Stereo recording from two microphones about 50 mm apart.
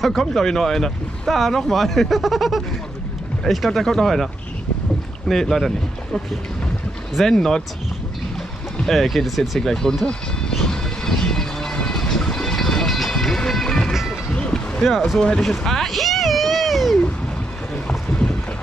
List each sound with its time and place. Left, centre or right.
0.0 s speech: centre
5.3 s speech: centre
7.2 s speech: centre
8.8 s speech: centre
9.6 s speech: centre
10.6 s vehicle: centre
13.4 s music: centre
14.3 s boat: centre
14.8 s speech: centre
15.1 s speech: centre
15.4 s a sound: centre
17.8 s boat: centre